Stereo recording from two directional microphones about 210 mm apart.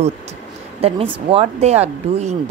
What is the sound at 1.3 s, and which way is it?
Speech, 30° right (ahead or behind).